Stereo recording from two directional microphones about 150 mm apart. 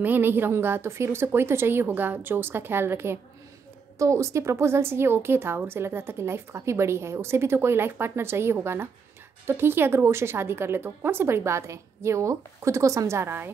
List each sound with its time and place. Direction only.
0.0 s a woman's voice: 15° right (ahead or behind)